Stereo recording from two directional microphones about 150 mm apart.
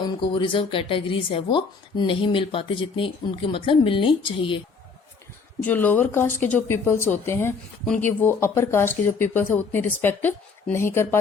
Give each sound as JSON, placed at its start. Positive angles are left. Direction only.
{"t": 0.0, "sound": "speech", "side_deg": 35}
{"t": 5.6, "sound": "speech", "side_deg": 10}